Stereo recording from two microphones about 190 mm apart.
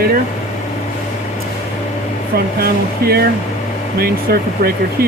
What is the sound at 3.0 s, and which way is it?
Speech, 55° right (ahead or behind).